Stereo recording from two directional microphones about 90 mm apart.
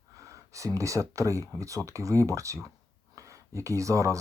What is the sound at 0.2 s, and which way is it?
Speech, 35° right (ahead or behind).